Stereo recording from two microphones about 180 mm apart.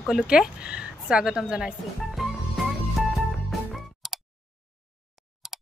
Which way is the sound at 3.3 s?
Centre (ahead or behind).